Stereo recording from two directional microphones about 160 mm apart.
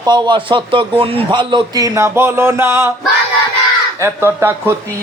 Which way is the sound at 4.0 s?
15° right (ahead or behind).